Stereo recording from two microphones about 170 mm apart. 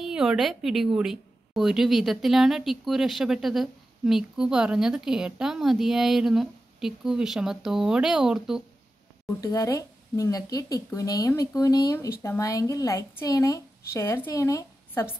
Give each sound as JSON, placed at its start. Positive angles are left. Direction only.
{"t": 0.0, "sound": "a woman's voice", "side_deg": -5}
{"t": 9.4, "sound": "a woman's voice", "side_deg": 20}